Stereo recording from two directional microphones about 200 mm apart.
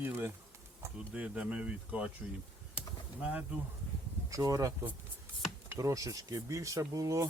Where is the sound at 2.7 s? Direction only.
5° right (ahead or behind).